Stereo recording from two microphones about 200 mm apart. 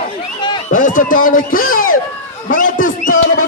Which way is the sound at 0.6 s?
40° left (ahead or behind).